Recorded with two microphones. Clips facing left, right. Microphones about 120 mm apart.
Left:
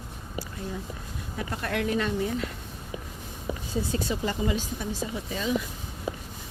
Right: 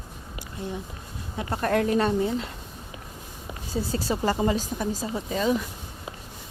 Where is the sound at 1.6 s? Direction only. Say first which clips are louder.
Right 6 dB; 40° right (ahead or behind).